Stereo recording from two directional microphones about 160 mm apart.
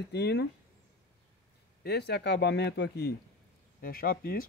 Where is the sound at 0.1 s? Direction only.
90° left.